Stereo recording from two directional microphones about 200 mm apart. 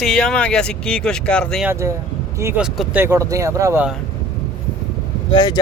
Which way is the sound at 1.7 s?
15° right (ahead or behind).